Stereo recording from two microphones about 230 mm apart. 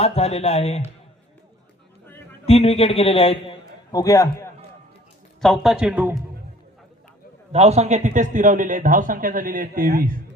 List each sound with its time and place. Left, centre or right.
0.0 s speech: left
2.5 s a man's voice: left
5.4 s speech: centre
7.5 s speech: right